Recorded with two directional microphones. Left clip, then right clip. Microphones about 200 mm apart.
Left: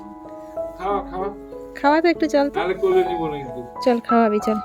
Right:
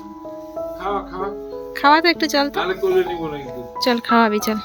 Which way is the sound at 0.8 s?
20° left (ahead or behind).